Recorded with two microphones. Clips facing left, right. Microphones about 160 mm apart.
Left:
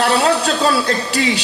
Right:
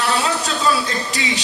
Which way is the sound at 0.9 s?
35° left (ahead or behind).